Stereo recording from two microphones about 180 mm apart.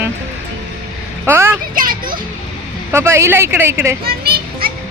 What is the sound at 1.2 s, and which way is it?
Speech, 15° right (ahead or behind).